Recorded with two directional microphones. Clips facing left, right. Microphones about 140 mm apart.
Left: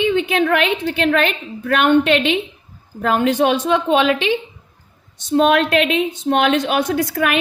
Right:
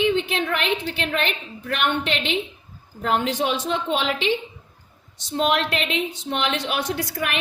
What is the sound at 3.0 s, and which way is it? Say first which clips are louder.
Speech: left 7 dB; 60° left (ahead or behind).